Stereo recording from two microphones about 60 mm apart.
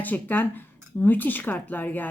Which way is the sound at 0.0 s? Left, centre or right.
Left.